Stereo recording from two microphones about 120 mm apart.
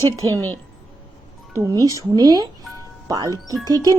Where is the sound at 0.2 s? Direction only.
30° right (ahead or behind).